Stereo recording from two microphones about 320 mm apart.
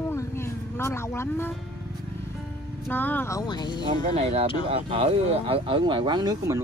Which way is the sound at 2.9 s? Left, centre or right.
Centre.